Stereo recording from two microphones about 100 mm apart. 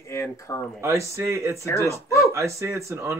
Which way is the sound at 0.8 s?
30° right (ahead or behind).